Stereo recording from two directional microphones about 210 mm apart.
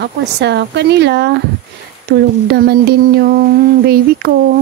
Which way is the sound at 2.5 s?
50° right (ahead or behind).